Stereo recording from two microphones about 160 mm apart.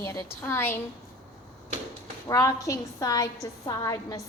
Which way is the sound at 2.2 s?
20° left (ahead or behind).